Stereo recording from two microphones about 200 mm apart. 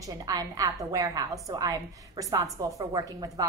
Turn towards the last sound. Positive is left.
turn(degrees=-15)  # may be behind; listen again after turning